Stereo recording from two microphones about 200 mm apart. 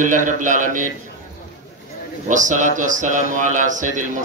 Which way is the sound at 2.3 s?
40° right (ahead or behind).